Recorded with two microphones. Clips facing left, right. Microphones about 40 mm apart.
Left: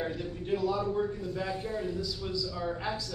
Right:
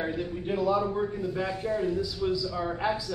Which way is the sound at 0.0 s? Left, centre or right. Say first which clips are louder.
Right 4 dB; centre.